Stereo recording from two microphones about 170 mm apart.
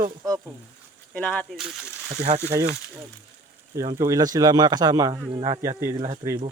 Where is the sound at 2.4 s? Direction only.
15° right (ahead or behind).